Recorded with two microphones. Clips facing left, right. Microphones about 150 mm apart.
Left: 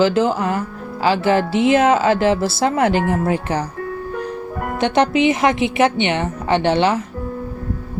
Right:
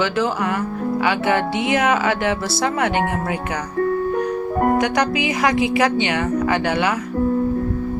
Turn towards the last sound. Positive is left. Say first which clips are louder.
# left 3 dB
turn(degrees=25)  # may be behind; listen again after turning